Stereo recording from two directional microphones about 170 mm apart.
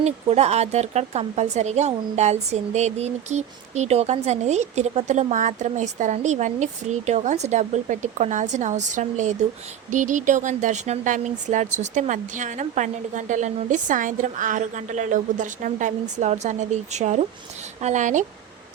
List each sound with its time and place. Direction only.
0.0 s speech: 40° right (ahead or behind)